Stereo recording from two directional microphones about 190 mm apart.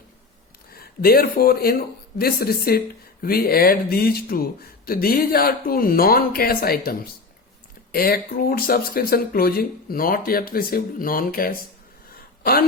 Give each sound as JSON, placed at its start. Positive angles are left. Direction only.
{"t": 0.7, "sound": "speech", "side_deg": 55}
{"t": 7.9, "sound": "speech", "side_deg": 50}
{"t": 12.1, "sound": "a sound", "side_deg": 50}